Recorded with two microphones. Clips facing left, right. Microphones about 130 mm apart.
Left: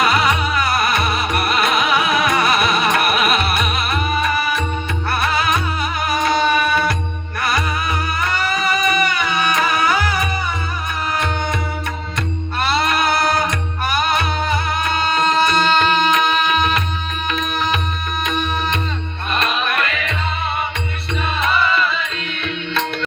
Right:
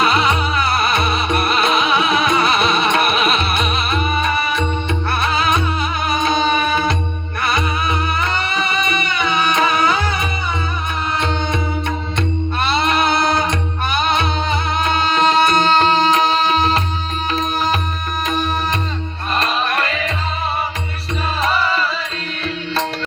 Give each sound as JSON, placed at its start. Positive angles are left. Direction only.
{"t": 0.0, "sound": "music", "side_deg": -25}
{"t": 19.3, "sound": "music", "side_deg": -35}
{"t": 21.4, "sound": "music", "side_deg": -35}